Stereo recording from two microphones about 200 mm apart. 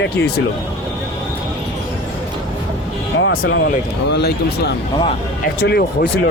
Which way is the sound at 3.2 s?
70° left (ahead or behind).